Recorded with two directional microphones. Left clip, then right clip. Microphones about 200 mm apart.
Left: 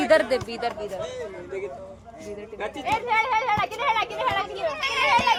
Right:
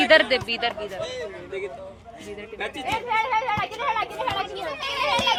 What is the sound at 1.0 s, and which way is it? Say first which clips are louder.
Speech: right 1 dB; 55° left (ahead or behind).